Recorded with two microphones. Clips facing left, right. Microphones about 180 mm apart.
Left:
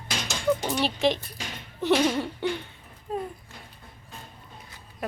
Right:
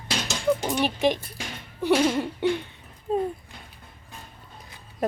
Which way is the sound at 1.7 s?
10° right (ahead or behind).